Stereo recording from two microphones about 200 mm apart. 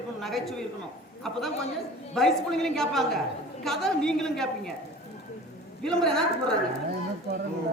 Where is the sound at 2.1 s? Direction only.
Centre (ahead or behind).